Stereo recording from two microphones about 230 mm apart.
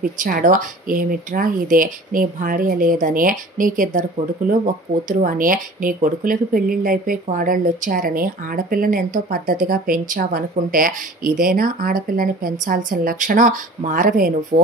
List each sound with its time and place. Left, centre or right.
0.0 s speech: right
5.0 s speech: right